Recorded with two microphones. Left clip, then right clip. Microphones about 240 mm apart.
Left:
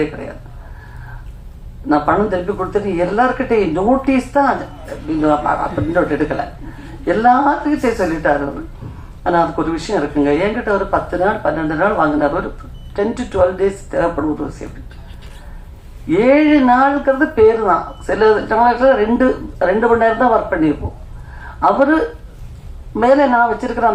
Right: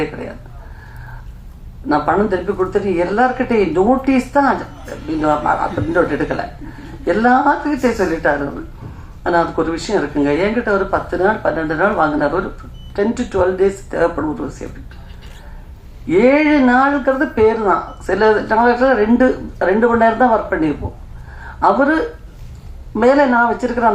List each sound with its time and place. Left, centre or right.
1.9 s a man's voice: right
16.0 s speech: right
23.0 s speech: right